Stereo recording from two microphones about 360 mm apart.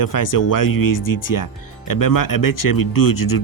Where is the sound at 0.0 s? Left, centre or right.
Left.